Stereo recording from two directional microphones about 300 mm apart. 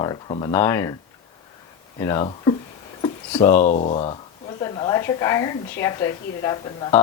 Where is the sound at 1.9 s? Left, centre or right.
Centre.